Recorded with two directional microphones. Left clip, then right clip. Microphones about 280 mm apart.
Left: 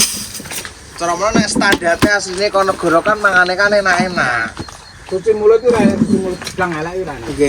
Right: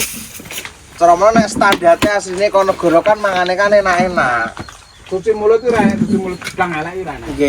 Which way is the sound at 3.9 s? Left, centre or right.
Right.